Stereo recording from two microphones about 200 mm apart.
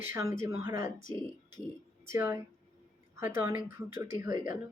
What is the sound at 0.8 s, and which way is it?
Speech, 40° left (ahead or behind).